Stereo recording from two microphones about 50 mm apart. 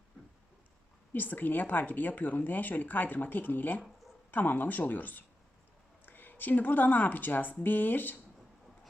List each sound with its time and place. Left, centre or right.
1.1 s speech: left